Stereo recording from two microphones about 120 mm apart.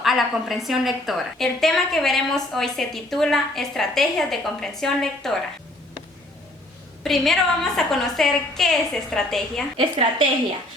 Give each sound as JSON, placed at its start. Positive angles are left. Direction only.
{"t": 0.0, "sound": "a woman's voice", "side_deg": 0}
{"t": 7.0, "sound": "a woman's voice", "side_deg": 0}
{"t": 9.7, "sound": "a woman's voice", "side_deg": -50}